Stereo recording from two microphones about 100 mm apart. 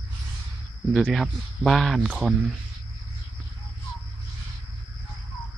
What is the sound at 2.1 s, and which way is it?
Speech, 10° right (ahead or behind).